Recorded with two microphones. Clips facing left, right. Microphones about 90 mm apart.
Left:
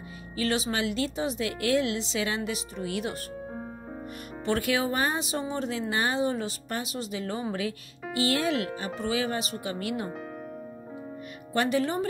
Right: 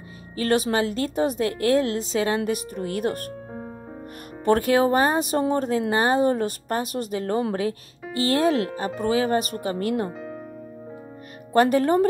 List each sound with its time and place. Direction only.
0.4 s speech: 45° right (ahead or behind)
4.5 s speech: 40° right (ahead or behind)
11.5 s speech: 40° right (ahead or behind)